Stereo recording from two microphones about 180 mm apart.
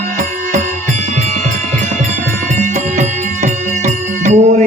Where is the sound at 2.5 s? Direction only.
40° right (ahead or behind).